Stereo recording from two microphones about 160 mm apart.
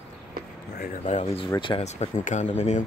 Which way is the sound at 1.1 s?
40° left (ahead or behind).